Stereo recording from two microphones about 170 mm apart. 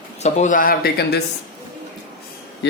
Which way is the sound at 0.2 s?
45° left (ahead or behind).